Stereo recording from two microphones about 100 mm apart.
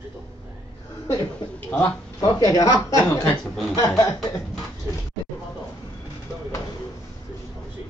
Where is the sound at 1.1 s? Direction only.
25° left (ahead or behind).